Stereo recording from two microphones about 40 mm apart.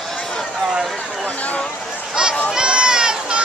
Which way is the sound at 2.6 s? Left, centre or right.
Right.